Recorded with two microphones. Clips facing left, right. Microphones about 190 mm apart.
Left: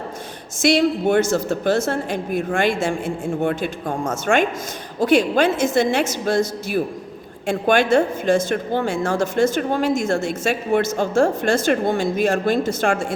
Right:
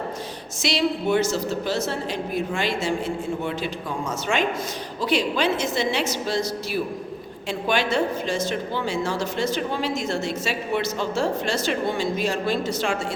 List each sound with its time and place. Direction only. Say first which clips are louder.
0.6 s a woman's voice: left 6 dB; 50° left (ahead or behind)